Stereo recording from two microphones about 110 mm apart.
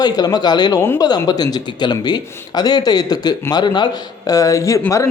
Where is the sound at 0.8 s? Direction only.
25° left (ahead or behind).